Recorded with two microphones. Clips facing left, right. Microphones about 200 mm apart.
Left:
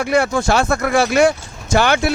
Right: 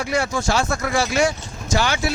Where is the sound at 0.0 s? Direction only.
55° left (ahead or behind).